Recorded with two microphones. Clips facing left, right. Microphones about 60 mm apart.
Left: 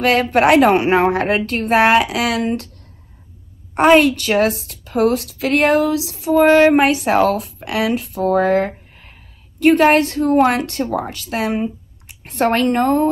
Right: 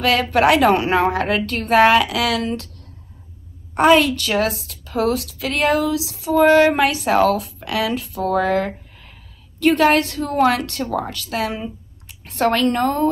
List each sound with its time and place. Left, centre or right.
0.0 s a woman's voice: left
3.7 s a woman's voice: left